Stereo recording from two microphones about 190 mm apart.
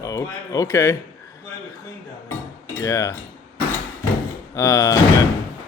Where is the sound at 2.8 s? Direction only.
15° left (ahead or behind).